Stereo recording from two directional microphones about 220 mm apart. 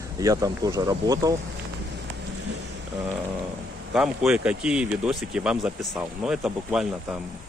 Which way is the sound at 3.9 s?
5° right (ahead or behind).